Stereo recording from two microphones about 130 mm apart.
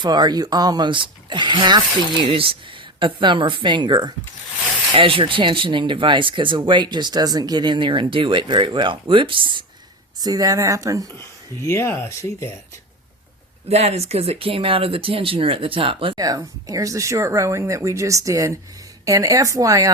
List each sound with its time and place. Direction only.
0.0 s speech: 35° right (ahead or behind)
10.2 s speech: 30° right (ahead or behind)
11.6 s speech: 20° left (ahead or behind)
13.7 s speech: 55° right (ahead or behind)
16.1 s speech: 30° right (ahead or behind)